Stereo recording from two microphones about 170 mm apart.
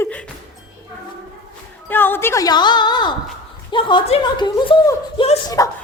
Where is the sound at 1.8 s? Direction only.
10° left (ahead or behind).